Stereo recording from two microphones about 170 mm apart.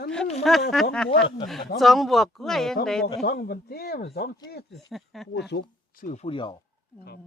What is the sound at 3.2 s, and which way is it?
Speech, 65° left (ahead or behind).